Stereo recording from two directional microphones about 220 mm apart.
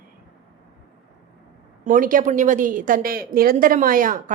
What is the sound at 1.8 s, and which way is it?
A woman's voice, 35° right (ahead or behind).